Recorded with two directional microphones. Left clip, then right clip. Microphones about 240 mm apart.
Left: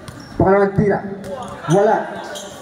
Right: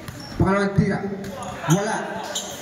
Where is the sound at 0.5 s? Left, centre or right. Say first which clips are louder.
Left 8 dB; left.